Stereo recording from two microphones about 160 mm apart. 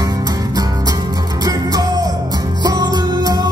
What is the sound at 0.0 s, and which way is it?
Music, 25° right (ahead or behind).